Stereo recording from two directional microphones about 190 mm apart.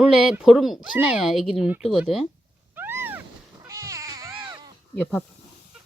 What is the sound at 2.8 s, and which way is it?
Cat, 10° right (ahead or behind).